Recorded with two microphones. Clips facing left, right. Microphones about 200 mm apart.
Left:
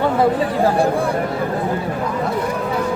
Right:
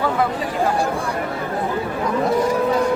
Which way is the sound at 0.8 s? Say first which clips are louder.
Left 5 dB; 55° left (ahead or behind).